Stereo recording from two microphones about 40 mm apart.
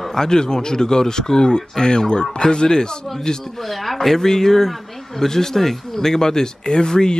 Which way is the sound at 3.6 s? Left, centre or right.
Centre.